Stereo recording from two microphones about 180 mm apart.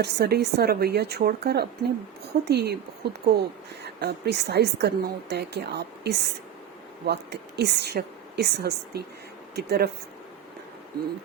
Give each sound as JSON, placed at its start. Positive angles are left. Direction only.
{"t": 0.0, "sound": "a woman's voice", "side_deg": -65}